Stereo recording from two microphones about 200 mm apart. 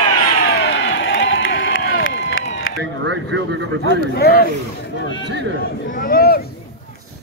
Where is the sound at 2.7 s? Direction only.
75° left (ahead or behind).